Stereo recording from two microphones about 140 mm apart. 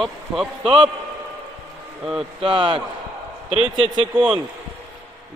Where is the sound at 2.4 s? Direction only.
35° right (ahead or behind).